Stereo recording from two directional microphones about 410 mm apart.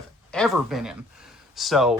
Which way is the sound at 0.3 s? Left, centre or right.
Centre.